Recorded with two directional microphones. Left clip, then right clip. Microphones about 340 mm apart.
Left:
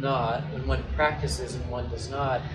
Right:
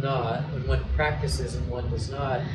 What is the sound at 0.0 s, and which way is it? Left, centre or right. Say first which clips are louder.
A man's voice: left 1 dB; centre.